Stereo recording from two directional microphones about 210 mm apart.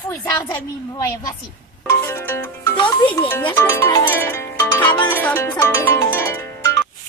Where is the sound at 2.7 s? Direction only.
20° left (ahead or behind).